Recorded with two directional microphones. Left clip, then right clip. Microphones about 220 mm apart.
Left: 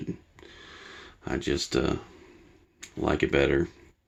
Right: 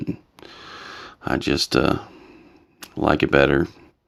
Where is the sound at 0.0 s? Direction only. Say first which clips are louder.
Right 7 dB; 35° right (ahead or behind).